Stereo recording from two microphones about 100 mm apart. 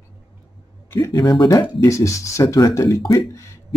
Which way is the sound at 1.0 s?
40° left (ahead or behind).